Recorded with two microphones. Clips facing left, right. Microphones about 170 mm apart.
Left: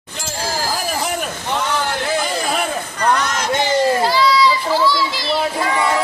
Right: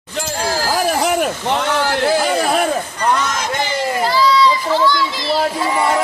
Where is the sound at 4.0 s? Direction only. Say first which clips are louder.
Right 1 dB; centre (ahead or behind).